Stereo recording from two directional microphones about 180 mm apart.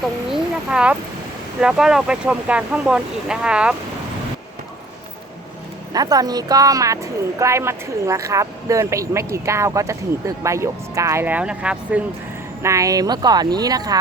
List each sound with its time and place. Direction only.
0.3 s a sound: 5° right (ahead or behind)
1.6 s speech: 5° right (ahead or behind)
5.9 s speech: 20° right (ahead or behind)
12.6 s speech: 20° right (ahead or behind)